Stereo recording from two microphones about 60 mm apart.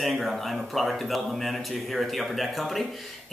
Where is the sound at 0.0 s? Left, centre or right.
Centre.